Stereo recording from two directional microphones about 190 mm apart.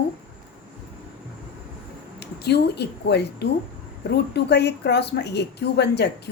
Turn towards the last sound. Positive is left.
turn(degrees=60)  # may be behind; listen again after turning